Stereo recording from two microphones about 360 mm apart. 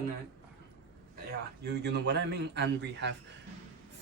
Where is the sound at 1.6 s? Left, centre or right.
Right.